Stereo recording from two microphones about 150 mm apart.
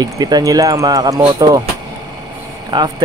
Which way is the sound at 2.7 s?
30° right (ahead or behind).